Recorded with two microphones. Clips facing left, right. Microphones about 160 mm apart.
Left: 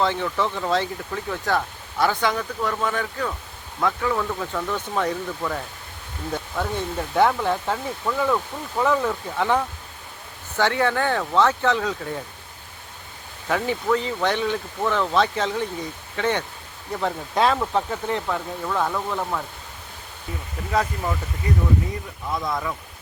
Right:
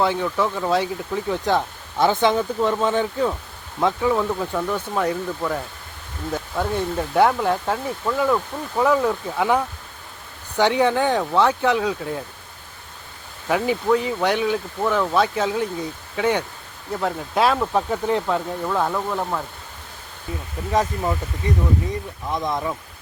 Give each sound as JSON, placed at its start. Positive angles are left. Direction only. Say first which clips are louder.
{"t": 0.0, "sound": "speech", "louder": "right 2 dB", "side_deg": -10}
{"t": 13.5, "sound": "speech", "louder": "right 3 dB", "side_deg": -10}
{"t": 20.7, "sound": "speech", "louder": "right 2 dB", "side_deg": -15}
{"t": 22.3, "sound": "speech", "louder": "right 2 dB", "side_deg": -20}